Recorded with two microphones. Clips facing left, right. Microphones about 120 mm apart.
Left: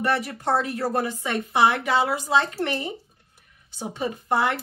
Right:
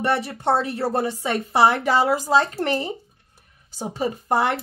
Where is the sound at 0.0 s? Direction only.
30° right (ahead or behind).